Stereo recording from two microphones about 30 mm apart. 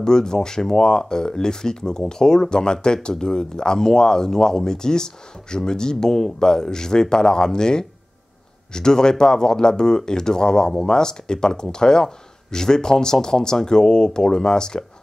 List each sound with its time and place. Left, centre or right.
0.0 s speech: left